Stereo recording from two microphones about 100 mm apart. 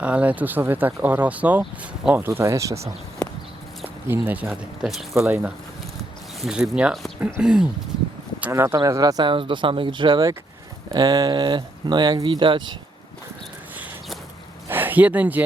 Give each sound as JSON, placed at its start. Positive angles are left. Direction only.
{"t": 0.0, "sound": "speech", "side_deg": -15}
{"t": 2.4, "sound": "speech", "side_deg": -30}
{"t": 4.1, "sound": "speech", "side_deg": -15}
{"t": 4.4, "sound": "speech", "side_deg": -5}
{"t": 5.2, "sound": "speech", "side_deg": -25}
{"t": 6.4, "sound": "speech", "side_deg": -5}
{"t": 8.4, "sound": "speech", "side_deg": -25}
{"t": 9.3, "sound": "speech", "side_deg": -55}
{"t": 10.9, "sound": "speech", "side_deg": -40}
{"t": 14.7, "sound": "a sound", "side_deg": -20}